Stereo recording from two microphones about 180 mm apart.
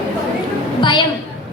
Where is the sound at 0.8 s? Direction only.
25° left (ahead or behind).